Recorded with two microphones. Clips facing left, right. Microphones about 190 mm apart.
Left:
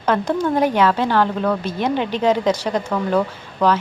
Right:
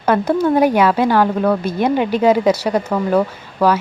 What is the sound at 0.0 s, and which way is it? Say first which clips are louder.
A woman's voice: right 4 dB; 10° right (ahead or behind).